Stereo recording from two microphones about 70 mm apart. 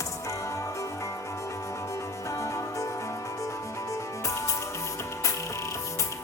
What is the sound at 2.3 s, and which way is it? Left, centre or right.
Music, left.